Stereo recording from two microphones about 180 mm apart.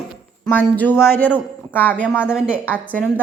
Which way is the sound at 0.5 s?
10° left (ahead or behind).